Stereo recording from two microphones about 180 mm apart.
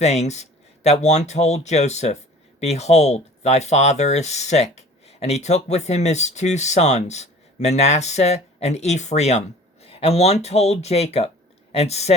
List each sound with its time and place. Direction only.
0.0 s speech: 40° left (ahead or behind)